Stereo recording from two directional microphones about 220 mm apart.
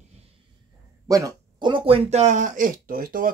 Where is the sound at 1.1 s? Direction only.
20° right (ahead or behind).